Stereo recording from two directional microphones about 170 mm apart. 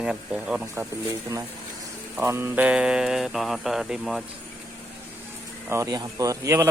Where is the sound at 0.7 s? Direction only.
15° right (ahead or behind).